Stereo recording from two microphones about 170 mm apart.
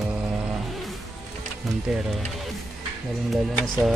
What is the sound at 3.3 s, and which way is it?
Speech, centre (ahead or behind).